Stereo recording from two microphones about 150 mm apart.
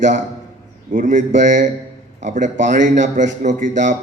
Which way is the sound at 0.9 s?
60° right (ahead or behind).